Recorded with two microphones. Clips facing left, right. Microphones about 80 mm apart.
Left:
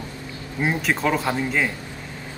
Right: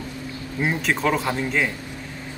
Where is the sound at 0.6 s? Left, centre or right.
Centre.